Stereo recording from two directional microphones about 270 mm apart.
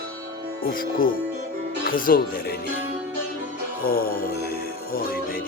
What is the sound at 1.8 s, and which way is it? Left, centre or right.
Speech, left.